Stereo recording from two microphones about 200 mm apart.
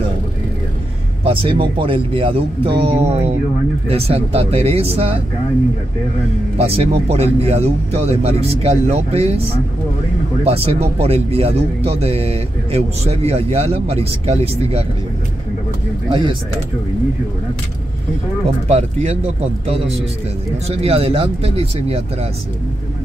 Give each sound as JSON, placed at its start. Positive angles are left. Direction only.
{"t": 1.2, "sound": "speech", "side_deg": -25}
{"t": 6.6, "sound": "speech", "side_deg": -30}
{"t": 16.1, "sound": "speech", "side_deg": -25}
{"t": 18.7, "sound": "speech", "side_deg": -30}
{"t": 20.6, "sound": "speech", "side_deg": -30}